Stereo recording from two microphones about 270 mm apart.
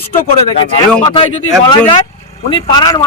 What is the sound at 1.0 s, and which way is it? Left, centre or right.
Speech, centre.